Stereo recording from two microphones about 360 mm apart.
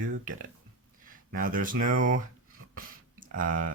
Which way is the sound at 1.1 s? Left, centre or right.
Right.